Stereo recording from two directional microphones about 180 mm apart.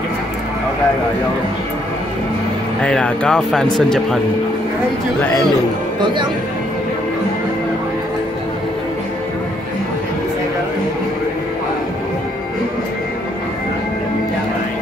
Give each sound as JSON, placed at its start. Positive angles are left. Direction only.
{"t": 2.8, "sound": "speech", "side_deg": 5}